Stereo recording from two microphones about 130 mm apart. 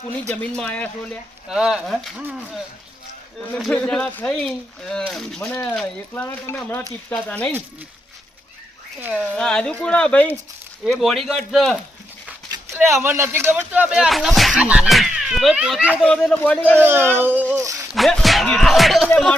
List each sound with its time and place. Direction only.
0.3 s speech: 10° left (ahead or behind)
1.5 s speech: 5° right (ahead or behind)
3.8 s speech: 5° left (ahead or behind)
9.0 s speech: 15° right (ahead or behind)
9.2 s speech: 5° left (ahead or behind)
13.0 s speech: 20° right (ahead or behind)
16.0 s speech: 5° left (ahead or behind)
16.8 s speech: 15° right (ahead or behind)
17.9 s speech: centre (ahead or behind)
19.0 s speech: 10° left (ahead or behind)